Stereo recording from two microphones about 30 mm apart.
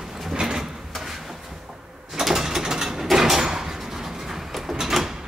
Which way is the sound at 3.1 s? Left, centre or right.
Centre.